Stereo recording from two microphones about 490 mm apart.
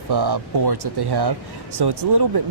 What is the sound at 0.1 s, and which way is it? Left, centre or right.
Speech, right.